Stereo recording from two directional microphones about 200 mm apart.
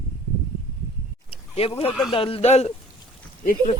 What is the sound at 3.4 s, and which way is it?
Speech, 45° left (ahead or behind).